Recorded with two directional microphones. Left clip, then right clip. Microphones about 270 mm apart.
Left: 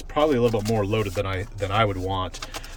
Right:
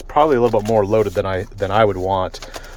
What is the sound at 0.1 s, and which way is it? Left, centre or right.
Speech, centre.